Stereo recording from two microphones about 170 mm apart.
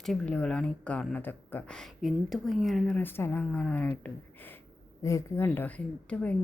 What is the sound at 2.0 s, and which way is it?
A woman's voice, centre (ahead or behind).